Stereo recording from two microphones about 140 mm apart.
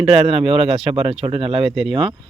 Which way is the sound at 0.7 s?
Centre (ahead or behind).